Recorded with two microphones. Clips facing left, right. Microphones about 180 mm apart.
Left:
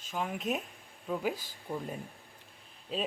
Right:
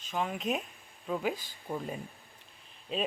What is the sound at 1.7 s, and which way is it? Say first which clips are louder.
Speech: right 1 dB; 10° right (ahead or behind).